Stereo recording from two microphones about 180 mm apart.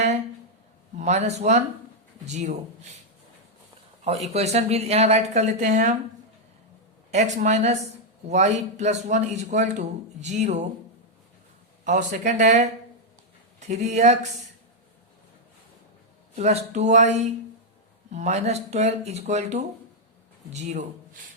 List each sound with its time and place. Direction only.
0.9 s speech: 40° right (ahead or behind)
4.0 s speech: 35° right (ahead or behind)
7.1 s speech: 40° right (ahead or behind)
11.9 s speech: 45° right (ahead or behind)
16.3 s speech: 35° right (ahead or behind)